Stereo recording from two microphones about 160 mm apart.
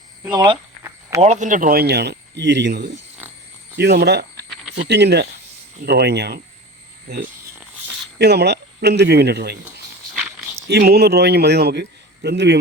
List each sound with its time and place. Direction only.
0.2 s speech: 25° right (ahead or behind)
1.2 s speech: 50° right (ahead or behind); by 2.9 s 90° right
3.2 s oink: 10° right (ahead or behind)
3.8 s a man's voice: 90° right
8.2 s a man's voice: 90° right
10.2 s a sound: 10° right (ahead or behind)
10.7 s a man's voice: 85° right